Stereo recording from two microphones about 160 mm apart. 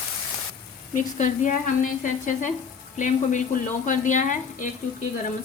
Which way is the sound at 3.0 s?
55° left (ahead or behind).